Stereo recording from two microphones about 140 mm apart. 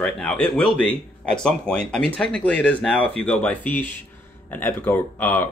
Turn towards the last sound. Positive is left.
turn(degrees=15)  # may be behind; listen again after turning